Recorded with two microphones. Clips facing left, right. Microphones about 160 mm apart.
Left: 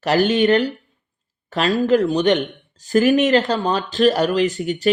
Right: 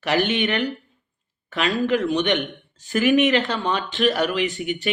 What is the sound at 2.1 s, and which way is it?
Speech, 35° left (ahead or behind).